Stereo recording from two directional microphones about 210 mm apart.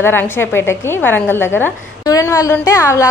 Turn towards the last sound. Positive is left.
turn(degrees=15)  # may be behind; listen again after turning